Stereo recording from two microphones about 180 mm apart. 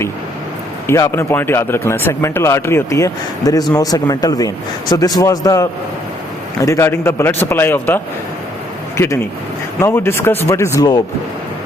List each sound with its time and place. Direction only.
0.9 s speech: 15° left (ahead or behind)
9.8 s speech: 15° left (ahead or behind)